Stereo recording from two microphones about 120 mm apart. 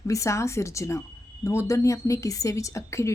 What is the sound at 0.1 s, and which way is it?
A woman's voice, 25° left (ahead or behind).